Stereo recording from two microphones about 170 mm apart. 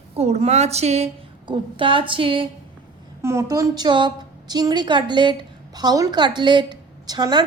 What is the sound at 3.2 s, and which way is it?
A woman's voice, 15° right (ahead or behind).